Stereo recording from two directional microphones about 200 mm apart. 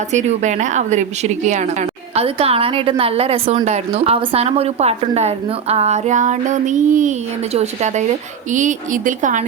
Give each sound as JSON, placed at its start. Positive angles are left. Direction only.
{"t": 0.1, "sound": "a woman's voice", "side_deg": -35}